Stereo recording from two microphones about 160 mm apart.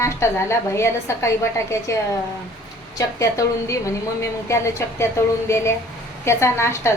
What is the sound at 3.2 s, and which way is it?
A woman's voice, 20° left (ahead or behind).